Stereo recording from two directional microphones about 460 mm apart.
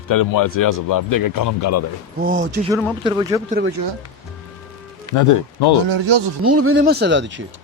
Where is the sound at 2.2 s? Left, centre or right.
Centre.